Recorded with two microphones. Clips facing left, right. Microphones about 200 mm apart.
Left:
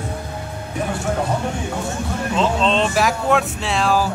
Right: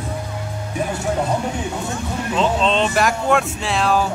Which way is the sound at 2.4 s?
Centre (ahead or behind).